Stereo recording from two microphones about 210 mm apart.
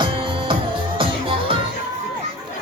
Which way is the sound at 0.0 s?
25° right (ahead or behind).